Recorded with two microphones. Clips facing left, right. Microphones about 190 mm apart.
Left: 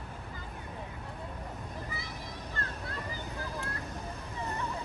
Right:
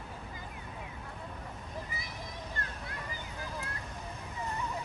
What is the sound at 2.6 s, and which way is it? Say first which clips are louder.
Vehicle: left 5 dB; 20° right (ahead or behind).